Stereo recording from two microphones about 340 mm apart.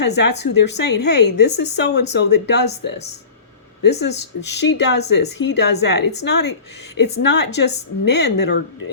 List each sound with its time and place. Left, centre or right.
0.2 s speech: left
4.0 s speech: left